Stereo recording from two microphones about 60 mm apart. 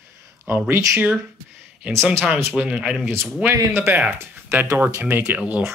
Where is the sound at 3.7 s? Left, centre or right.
Right.